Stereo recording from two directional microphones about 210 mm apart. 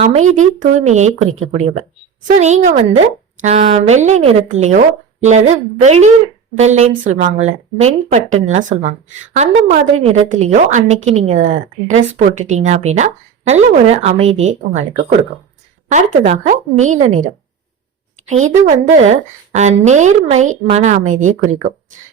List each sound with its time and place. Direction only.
0.0 s speech: 30° right (ahead or behind)
2.4 s a woman's voice: 30° right (ahead or behind)
18.3 s speech: 35° right (ahead or behind)